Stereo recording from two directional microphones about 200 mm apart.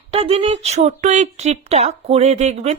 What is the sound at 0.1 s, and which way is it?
A woman's voice, 30° right (ahead or behind).